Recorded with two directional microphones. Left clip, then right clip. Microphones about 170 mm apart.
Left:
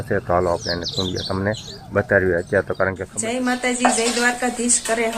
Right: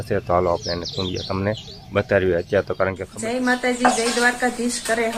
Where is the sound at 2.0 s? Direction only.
10° right (ahead or behind).